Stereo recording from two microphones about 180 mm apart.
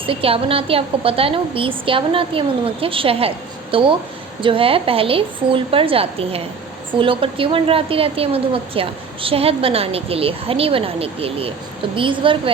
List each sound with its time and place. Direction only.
0.0 s a woman's voice: 30° right (ahead or behind)